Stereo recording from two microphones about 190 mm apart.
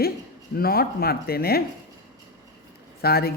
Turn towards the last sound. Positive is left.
turn(degrees=55)  # may be behind; listen again after turning